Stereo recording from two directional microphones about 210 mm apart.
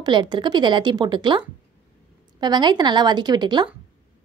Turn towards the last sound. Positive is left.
turn(degrees=-20)  # may be behind; listen again after turning